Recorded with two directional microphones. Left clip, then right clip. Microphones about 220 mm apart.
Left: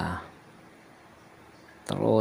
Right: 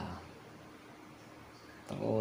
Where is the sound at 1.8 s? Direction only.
40° left (ahead or behind).